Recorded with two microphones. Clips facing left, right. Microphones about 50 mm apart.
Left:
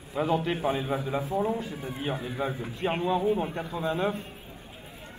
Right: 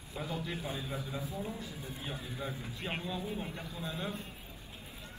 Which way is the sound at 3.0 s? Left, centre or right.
Left.